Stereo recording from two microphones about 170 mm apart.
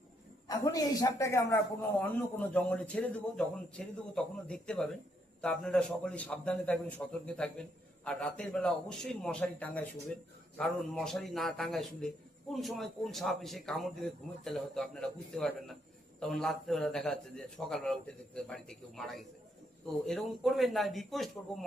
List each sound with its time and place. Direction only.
0.4 s a woman's voice: 20° left (ahead or behind); by 21.6 s centre (ahead or behind)